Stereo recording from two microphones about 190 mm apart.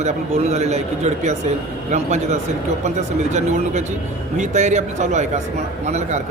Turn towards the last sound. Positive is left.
turn(degrees=-35)  # may be behind; listen again after turning